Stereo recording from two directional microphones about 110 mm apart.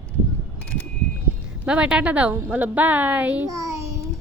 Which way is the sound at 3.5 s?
30° right (ahead or behind).